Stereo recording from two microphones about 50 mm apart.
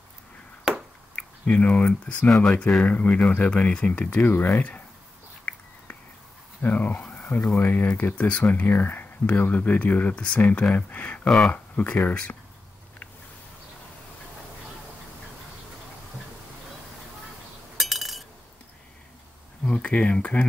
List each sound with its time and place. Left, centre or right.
1.1 s speech: left
2.2 s speech: centre
2.8 s speech: left
6.6 s speech: left
7.0 s a sound: centre
7.5 s speech: left
11.2 s speech: centre
11.5 s speech: left
17.7 s chink: centre
19.6 s speech: left